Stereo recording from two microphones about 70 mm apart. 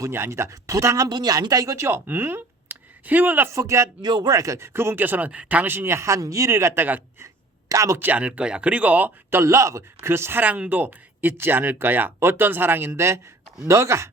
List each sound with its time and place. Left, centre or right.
0.0 s speech: right
1.0 s speech: right
2.0 s speech: right
3.5 s speech: right
4.0 s speech: right
4.4 s speech: right
4.6 s speech: right
6.5 s speech: right
7.7 s speech: right
7.9 s speech: right
9.4 s speech: right
10.1 s speech: right
10.4 s speech: right